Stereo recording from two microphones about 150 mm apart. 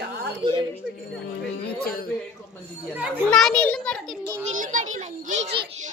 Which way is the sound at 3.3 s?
5° left (ahead or behind).